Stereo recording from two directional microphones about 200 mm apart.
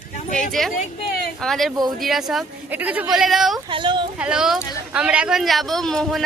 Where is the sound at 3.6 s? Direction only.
25° right (ahead or behind).